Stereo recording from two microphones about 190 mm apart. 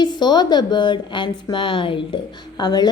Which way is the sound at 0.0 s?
20° left (ahead or behind).